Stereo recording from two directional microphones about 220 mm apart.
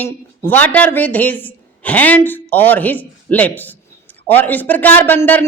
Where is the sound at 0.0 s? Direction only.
10° left (ahead or behind).